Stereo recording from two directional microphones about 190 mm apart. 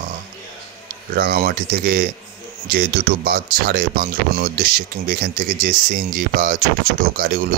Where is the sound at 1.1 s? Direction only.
55° right (ahead or behind).